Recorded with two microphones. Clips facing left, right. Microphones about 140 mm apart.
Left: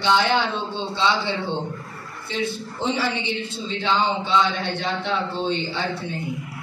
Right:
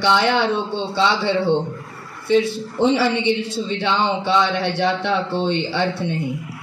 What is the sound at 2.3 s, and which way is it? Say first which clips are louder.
A man's voice: right 10 dB; 70° right (ahead or behind).